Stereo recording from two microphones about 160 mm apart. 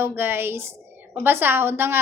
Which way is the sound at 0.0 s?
15° right (ahead or behind).